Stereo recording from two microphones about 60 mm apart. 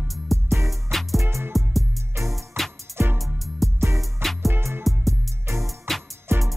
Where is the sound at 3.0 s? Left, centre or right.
Right.